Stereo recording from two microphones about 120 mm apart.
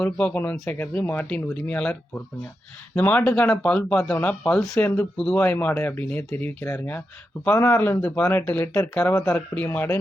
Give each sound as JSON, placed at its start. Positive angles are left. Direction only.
{"t": 0.0, "sound": "speech", "side_deg": 10}